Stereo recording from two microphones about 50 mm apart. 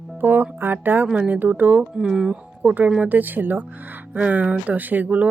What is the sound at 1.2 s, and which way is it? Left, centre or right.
Speech, right.